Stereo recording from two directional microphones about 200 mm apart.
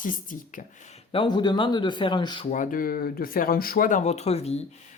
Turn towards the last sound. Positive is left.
turn(degrees=30)  # may be behind; listen again after turning